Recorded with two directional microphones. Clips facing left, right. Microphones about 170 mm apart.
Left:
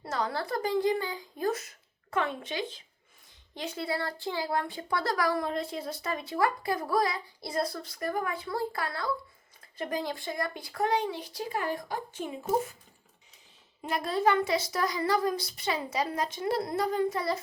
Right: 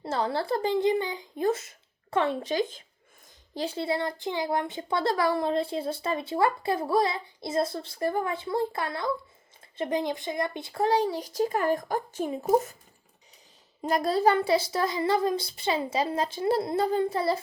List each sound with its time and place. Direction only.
0.0 s speech: 25° right (ahead or behind); by 2.8 s 45° right (ahead or behind)
3.5 s speech: 30° right (ahead or behind)
13.8 s speech: 40° right (ahead or behind)